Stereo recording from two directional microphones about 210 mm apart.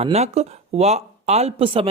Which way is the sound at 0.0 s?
30° right (ahead or behind).